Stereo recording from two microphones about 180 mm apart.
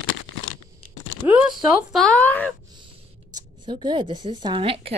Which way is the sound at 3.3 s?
25° right (ahead or behind).